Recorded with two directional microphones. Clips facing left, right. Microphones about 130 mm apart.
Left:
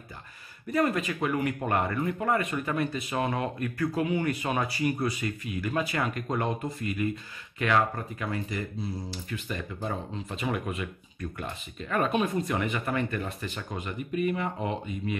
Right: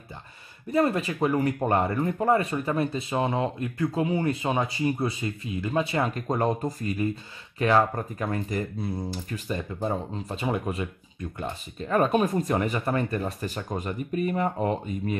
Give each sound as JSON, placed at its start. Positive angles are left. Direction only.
{"t": 0.7, "sound": "speech", "side_deg": -30}
{"t": 9.3, "sound": "speech", "side_deg": -30}